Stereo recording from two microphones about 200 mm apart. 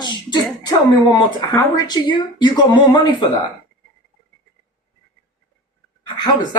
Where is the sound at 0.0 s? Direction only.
20° left (ahead or behind).